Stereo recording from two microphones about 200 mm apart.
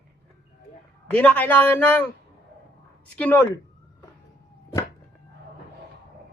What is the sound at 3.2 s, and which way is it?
Speech, 10° left (ahead or behind).